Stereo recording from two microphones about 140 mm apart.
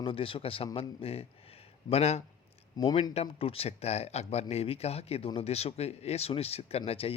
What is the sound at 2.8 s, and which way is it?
Speech, 35° left (ahead or behind).